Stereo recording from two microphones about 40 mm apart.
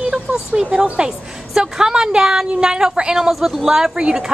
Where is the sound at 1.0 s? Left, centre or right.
Centre.